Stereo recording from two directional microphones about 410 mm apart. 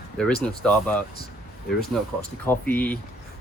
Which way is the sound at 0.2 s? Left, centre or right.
Centre.